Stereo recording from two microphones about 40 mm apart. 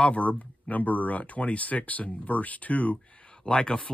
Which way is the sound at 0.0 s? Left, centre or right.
Left.